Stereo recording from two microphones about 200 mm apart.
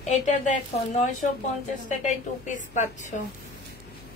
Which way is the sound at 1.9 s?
35° left (ahead or behind).